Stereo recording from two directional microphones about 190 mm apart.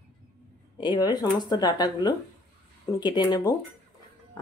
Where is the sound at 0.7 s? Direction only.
25° left (ahead or behind).